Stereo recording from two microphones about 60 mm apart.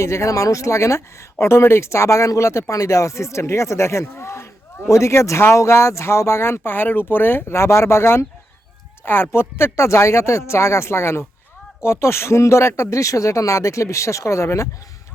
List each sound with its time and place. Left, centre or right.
0.0 s speech: left
4.2 s a sound: left
4.9 s speech: left